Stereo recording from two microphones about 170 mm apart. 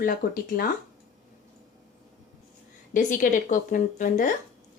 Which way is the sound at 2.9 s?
50° left (ahead or behind).